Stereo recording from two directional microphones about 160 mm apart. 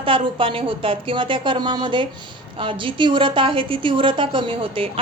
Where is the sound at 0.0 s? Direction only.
35° right (ahead or behind).